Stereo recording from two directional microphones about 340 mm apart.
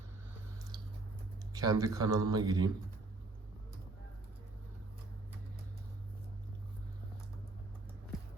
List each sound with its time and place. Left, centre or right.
1.5 s speech: centre